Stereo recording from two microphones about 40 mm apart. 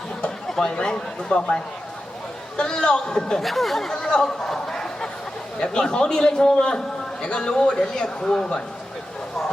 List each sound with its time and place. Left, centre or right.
0.4 s a man's voice: centre
3.4 s a man's voice: centre